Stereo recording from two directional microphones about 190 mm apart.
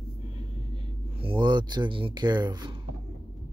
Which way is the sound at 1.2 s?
25° right (ahead or behind).